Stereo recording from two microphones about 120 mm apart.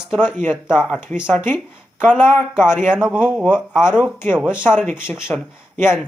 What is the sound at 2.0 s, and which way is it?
Speech, 15° left (ahead or behind).